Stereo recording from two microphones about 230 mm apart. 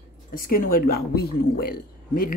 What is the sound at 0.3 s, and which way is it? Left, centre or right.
Speech, left.